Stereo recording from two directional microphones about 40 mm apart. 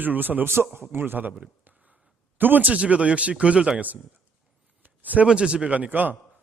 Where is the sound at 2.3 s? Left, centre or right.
Right.